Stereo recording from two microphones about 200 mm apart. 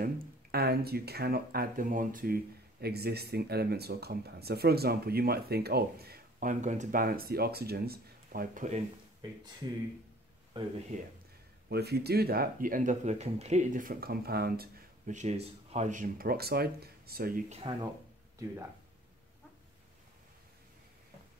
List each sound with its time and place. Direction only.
0.0 s speech: 50° right (ahead or behind)
10.6 s speech: 25° right (ahead or behind)
10.9 s speech: 40° right (ahead or behind)
11.7 s speech: 55° right (ahead or behind)
17.5 s speech: 30° right (ahead or behind)